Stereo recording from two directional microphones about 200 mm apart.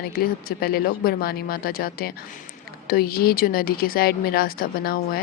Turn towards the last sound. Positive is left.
turn(degrees=50)  # may be behind; listen again after turning